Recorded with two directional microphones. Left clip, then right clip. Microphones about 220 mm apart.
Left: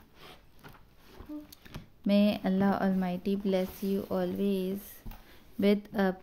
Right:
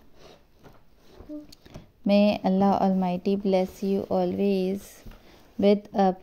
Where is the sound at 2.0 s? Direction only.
15° right (ahead or behind).